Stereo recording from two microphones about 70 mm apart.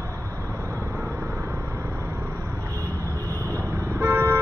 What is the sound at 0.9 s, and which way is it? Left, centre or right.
Vehicle, right.